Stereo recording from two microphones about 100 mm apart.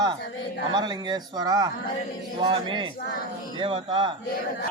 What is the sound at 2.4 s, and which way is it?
Speech, 55° right (ahead or behind).